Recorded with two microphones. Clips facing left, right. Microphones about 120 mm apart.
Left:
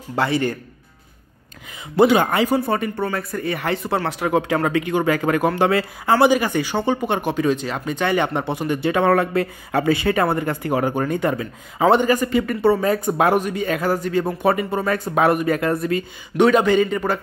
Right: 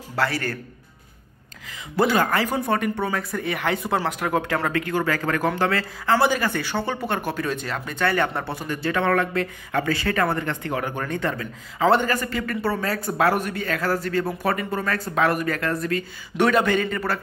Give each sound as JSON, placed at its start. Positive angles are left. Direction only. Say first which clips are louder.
{"t": 0.1, "sound": "speech", "louder": "left 5 dB", "side_deg": 20}
{"t": 2.0, "sound": "speech", "louder": "left 5 dB", "side_deg": 20}
{"t": 2.5, "sound": "speech", "louder": "left 3 dB", "side_deg": 5}
{"t": 4.2, "sound": "speech", "louder": "left 4 dB", "side_deg": 10}
{"t": 11.1, "sound": "speech", "louder": "left 5 dB", "side_deg": 15}